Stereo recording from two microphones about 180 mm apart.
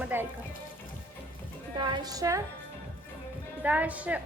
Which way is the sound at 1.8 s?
25° right (ahead or behind).